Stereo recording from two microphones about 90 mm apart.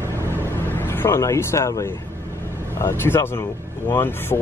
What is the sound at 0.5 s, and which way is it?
Vehicle, 25° left (ahead or behind).